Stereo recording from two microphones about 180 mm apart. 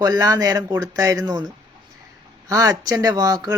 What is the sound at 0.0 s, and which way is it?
Speech, 20° right (ahead or behind).